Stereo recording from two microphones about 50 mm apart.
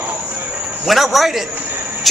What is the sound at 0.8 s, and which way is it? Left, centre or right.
A man's voice, centre.